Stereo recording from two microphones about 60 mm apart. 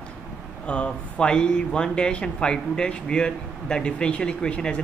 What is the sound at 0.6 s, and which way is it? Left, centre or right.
Speech, centre.